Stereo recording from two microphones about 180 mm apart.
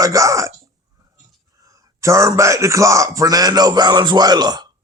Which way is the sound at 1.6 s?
20° right (ahead or behind).